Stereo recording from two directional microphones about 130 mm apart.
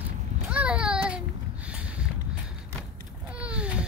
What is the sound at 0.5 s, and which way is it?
Child singing, 10° right (ahead or behind).